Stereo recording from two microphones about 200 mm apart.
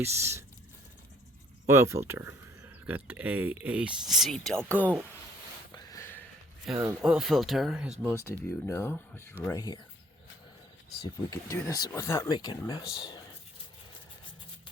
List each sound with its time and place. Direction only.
0.0 s speech: 15° right (ahead or behind)
1.6 s speech: 15° right (ahead or behind); by 4.9 s 5° left (ahead or behind)
5.7 s a sound: 15° left (ahead or behind)
6.7 s speech: centre (ahead or behind)
8.0 s speech: 10° left (ahead or behind)
11.0 s speech: 15° left (ahead or behind)